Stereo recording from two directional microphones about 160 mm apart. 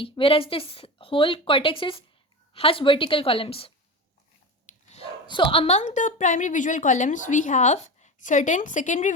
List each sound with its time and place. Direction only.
0.0 s a woman's voice: 35° left (ahead or behind)
4.7 s dog: 50° left (ahead or behind)
5.2 s a woman's voice: 30° left (ahead or behind); by 9.1 s 50° left (ahead or behind)